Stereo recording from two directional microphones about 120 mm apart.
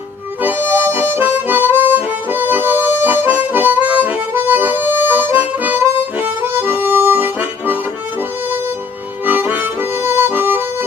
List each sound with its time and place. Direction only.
0.4 s harmonica: 15° right (ahead or behind)
9.2 s music: 15° right (ahead or behind)